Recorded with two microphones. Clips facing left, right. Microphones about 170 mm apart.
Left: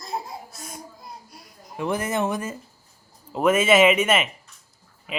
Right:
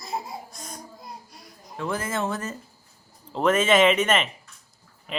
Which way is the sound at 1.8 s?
15° left (ahead or behind).